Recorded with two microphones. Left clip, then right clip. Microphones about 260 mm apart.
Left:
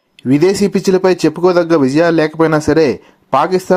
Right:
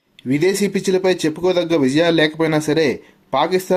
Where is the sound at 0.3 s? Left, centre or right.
Left.